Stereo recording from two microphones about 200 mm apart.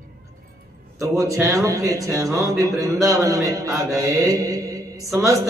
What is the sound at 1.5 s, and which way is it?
A man's voice, 15° right (ahead or behind).